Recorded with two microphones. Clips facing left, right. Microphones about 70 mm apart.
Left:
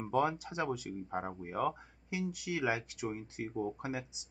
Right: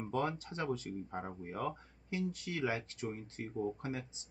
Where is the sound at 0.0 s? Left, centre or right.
Centre.